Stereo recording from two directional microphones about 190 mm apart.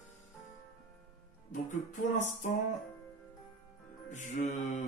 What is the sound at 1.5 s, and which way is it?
Speech, 40° left (ahead or behind).